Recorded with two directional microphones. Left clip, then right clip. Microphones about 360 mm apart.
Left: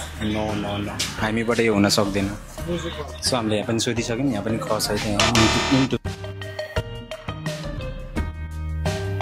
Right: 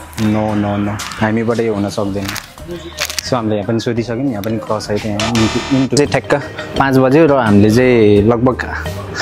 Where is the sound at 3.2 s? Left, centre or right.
Centre.